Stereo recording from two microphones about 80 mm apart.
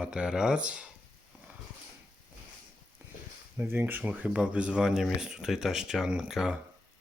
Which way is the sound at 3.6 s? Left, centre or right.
Right.